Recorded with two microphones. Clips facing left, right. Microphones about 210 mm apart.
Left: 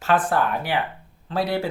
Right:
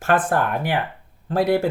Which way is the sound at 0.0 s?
50° right (ahead or behind).